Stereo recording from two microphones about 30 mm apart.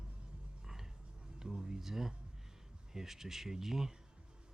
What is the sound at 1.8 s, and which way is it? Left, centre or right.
Speech, centre.